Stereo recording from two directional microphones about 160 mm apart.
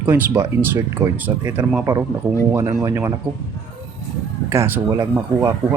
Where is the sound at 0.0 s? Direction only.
15° right (ahead or behind).